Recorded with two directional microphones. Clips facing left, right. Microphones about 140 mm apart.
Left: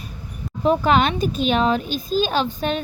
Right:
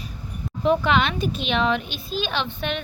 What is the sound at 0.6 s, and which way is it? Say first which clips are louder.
Speech: left 3 dB; 40° left (ahead or behind).